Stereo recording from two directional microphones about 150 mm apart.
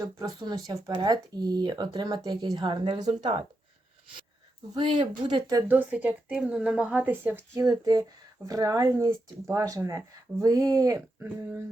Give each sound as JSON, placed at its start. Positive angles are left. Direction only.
{"t": 0.0, "sound": "speech", "side_deg": -25}
{"t": 4.7, "sound": "speech", "side_deg": -30}
{"t": 5.6, "sound": "speech", "side_deg": -10}
{"t": 7.6, "sound": "speech", "side_deg": -25}